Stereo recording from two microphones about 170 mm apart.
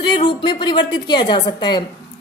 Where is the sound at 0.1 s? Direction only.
25° left (ahead or behind).